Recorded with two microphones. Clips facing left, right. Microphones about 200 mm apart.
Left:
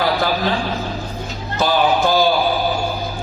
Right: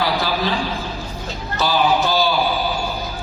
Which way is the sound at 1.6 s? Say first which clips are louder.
Left 2 dB; 50° left (ahead or behind).